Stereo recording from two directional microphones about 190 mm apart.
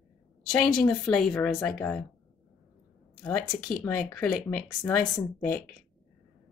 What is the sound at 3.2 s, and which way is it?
Speech, 5° left (ahead or behind).